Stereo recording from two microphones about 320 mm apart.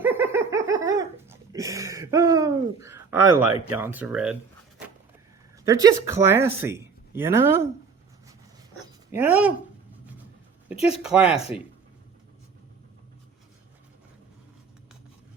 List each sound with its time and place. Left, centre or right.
0.0 s laughter: centre
5.6 s a man's voice: centre
9.1 s speech: centre
11.0 s speech: centre